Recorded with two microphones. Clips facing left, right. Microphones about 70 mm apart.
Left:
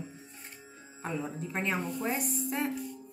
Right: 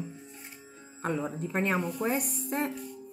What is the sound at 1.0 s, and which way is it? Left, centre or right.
Speech, right.